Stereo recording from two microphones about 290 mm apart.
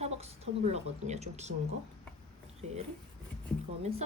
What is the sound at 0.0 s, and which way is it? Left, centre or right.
A woman's voice, right.